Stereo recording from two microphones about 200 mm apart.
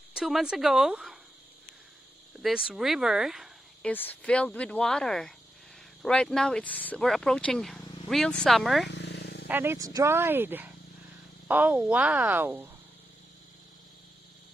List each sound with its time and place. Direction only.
0.1 s speech: 5° right (ahead or behind)
2.3 s speech: 5° right (ahead or behind)
3.9 s speech: 10° left (ahead or behind)
8.8 s a sound: 60° left (ahead or behind)
9.5 s speech: 10° right (ahead or behind)